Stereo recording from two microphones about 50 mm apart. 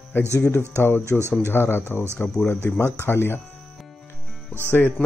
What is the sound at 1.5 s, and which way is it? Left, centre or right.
Speech, left.